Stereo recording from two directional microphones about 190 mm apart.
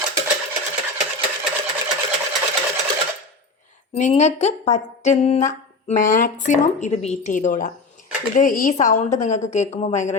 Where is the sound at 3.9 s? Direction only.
35° left (ahead or behind).